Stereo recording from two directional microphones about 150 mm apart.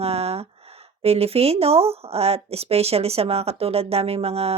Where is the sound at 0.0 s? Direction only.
40° right (ahead or behind).